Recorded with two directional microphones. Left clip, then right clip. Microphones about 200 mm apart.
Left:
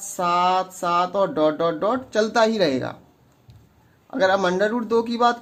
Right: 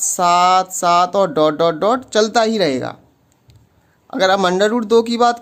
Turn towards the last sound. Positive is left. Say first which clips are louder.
# right 6 dB
turn(degrees=-35)  # may be behind; listen again after turning